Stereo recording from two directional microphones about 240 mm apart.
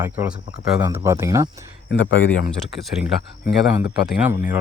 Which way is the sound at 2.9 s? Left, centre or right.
Centre.